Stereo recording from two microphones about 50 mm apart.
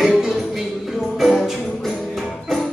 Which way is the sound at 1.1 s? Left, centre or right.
Centre.